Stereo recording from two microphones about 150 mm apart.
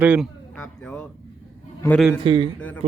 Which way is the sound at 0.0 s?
10° right (ahead or behind).